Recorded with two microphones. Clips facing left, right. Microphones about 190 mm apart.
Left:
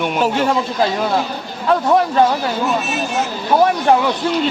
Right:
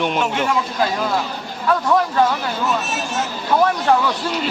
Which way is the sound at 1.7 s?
25° left (ahead or behind).